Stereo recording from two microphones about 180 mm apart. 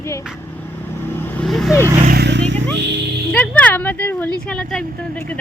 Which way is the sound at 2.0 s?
65° right (ahead or behind).